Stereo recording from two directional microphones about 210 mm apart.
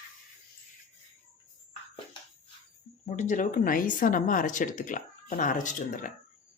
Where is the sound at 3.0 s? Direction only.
35° left (ahead or behind).